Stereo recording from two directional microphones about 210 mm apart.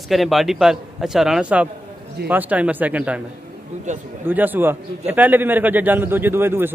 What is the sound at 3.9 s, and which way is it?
Speech, 35° right (ahead or behind).